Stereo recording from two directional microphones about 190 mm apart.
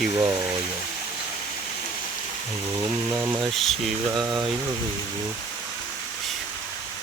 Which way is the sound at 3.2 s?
5° right (ahead or behind).